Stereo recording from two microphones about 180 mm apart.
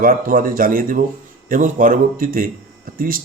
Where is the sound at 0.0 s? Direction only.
50° right (ahead or behind).